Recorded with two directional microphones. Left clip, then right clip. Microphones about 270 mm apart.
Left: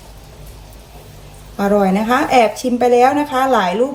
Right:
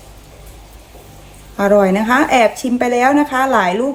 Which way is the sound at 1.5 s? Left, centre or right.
Right.